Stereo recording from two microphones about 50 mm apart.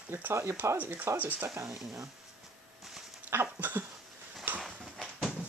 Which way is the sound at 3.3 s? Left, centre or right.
Right.